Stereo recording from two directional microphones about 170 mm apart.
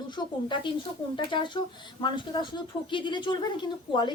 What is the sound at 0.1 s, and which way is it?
Speech, 25° left (ahead or behind).